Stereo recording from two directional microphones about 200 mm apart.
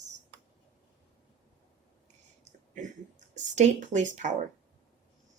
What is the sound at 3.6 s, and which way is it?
Speech, 35° right (ahead or behind).